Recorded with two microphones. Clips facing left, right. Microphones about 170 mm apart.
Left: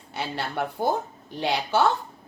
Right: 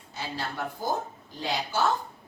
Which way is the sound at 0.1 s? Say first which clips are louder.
Left 4 dB; 70° left (ahead or behind).